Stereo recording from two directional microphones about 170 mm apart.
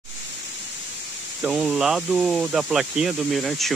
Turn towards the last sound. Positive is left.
turn(degrees=0)  # may be behind; listen again after turning